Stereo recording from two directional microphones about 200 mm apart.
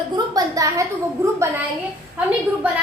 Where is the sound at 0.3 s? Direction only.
15° right (ahead or behind).